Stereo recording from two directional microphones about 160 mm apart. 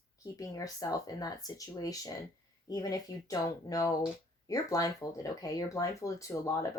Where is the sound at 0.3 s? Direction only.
20° left (ahead or behind).